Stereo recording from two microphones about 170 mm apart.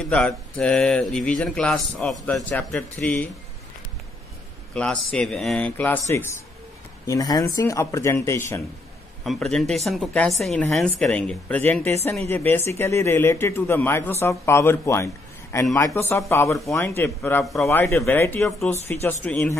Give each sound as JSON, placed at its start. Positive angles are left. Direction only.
{"t": 0.1, "sound": "speech", "side_deg": 5}
{"t": 4.7, "sound": "speech", "side_deg": 5}
{"t": 9.2, "sound": "speech", "side_deg": 0}